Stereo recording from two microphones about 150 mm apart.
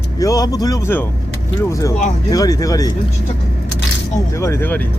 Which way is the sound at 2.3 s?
25° left (ahead or behind).